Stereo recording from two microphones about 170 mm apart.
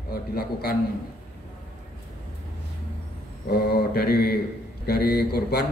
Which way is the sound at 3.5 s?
65° left (ahead or behind).